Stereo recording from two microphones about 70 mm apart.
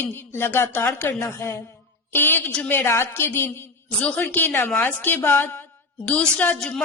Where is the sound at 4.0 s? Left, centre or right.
Left.